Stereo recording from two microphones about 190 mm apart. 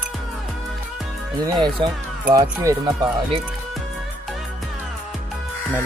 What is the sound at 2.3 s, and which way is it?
Speech, 15° right (ahead or behind).